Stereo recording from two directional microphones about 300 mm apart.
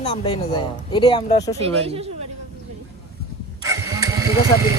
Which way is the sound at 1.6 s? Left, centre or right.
Centre.